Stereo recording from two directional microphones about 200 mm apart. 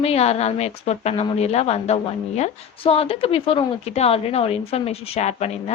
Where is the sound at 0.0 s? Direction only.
30° left (ahead or behind).